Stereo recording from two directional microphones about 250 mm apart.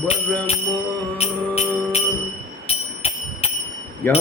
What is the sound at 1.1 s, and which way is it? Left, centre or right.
Music, left.